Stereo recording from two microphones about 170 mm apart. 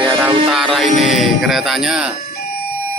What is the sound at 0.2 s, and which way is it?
Music, centre (ahead or behind).